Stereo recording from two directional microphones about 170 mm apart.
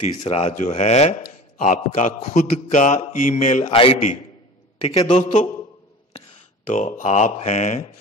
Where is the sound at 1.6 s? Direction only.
45° left (ahead or behind).